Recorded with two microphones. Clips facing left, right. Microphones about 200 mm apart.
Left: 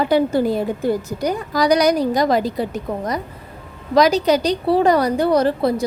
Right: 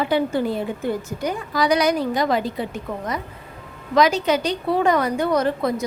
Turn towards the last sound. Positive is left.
turn(degrees=35)  # may be behind; listen again after turning